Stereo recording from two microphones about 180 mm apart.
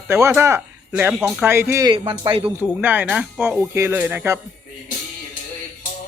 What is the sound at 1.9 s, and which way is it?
Speech, 25° right (ahead or behind).